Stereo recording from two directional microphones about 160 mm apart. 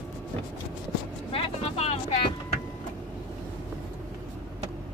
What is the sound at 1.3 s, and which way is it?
Vehicle, 35° left (ahead or behind).